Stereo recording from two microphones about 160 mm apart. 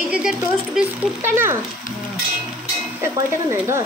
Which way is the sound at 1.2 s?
15° right (ahead or behind).